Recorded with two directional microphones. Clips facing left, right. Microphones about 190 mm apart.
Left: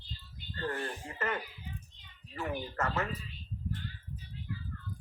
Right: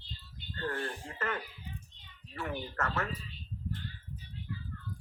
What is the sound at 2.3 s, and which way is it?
Speech, 10° left (ahead or behind).